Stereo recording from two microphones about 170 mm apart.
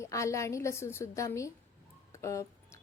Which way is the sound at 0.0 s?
15° left (ahead or behind).